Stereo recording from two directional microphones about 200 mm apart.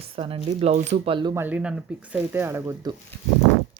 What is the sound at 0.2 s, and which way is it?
Speech, 25° right (ahead or behind).